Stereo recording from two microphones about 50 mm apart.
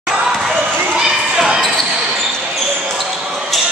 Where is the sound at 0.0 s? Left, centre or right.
Centre.